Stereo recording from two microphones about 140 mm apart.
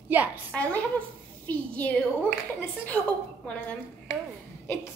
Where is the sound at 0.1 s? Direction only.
15° right (ahead or behind).